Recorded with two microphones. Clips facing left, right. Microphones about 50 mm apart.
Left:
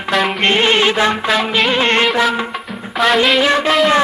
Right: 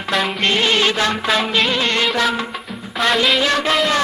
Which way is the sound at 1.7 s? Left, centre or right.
Left.